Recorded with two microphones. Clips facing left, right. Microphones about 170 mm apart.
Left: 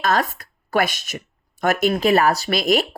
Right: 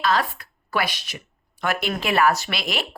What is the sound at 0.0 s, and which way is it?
A woman's voice, 45° left (ahead or behind).